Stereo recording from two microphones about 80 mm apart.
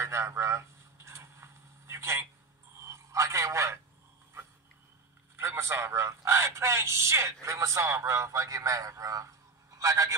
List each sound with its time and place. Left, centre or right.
0.0 s a sound: right
2.8 s a man's voice: right
5.3 s a man's voice: right